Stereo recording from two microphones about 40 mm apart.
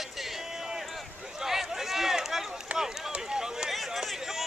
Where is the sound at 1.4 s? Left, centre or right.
Centre.